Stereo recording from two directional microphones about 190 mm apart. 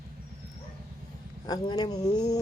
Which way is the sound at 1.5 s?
25° left (ahead or behind).